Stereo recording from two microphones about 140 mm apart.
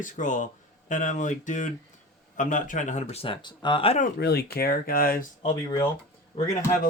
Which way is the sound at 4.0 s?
90° left.